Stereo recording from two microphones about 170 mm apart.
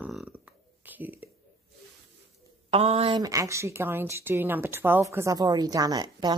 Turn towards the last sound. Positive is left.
turn(degrees=-25)  # may be behind; listen again after turning